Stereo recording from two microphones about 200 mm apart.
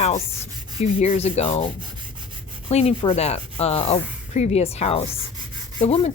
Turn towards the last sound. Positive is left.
turn(degrees=30)  # may be behind; listen again after turning